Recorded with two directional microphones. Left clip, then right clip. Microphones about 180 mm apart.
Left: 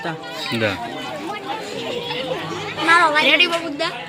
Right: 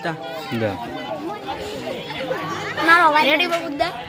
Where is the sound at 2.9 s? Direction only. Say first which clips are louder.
Even; 60° right (ahead or behind).